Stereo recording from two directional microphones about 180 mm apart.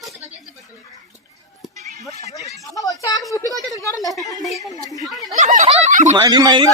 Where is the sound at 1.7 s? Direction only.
40° right (ahead or behind).